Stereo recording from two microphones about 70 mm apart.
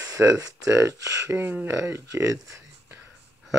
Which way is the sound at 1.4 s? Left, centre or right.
Right.